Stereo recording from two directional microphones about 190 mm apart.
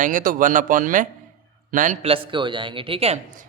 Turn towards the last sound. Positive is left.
turn(degrees=-30)  # may be behind; listen again after turning